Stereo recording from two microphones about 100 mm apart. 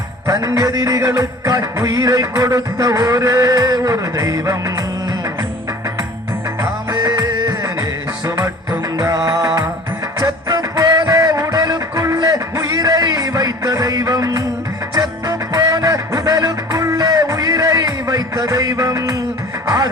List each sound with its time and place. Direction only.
0.3 s music: 35° right (ahead or behind)
6.6 s music: 35° right (ahead or behind)
9.0 s music: 35° right (ahead or behind)